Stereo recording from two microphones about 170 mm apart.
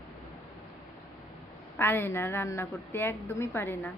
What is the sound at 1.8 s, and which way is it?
A woman's voice, 15° left (ahead or behind).